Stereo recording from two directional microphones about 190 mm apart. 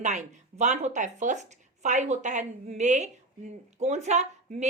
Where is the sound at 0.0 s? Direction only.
40° right (ahead or behind).